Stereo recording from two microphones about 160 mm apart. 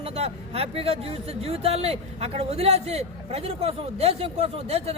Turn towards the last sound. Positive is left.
turn(degrees=-40)  # may be behind; listen again after turning